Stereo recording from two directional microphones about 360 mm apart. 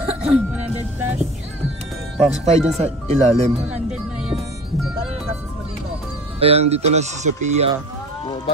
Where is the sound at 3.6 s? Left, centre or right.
Centre.